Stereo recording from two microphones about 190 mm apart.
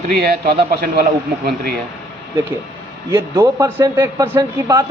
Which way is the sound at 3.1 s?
15° right (ahead or behind).